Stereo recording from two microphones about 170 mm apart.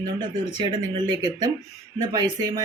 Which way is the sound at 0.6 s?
25° right (ahead or behind).